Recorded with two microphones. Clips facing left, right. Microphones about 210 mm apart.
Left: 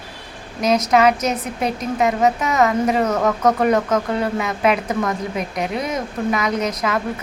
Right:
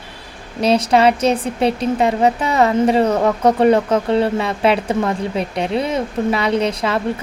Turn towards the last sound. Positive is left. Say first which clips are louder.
# right 3 dB
turn(degrees=-30)  # may be behind; listen again after turning